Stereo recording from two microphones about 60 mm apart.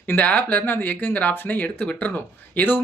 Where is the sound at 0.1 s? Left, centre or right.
Left.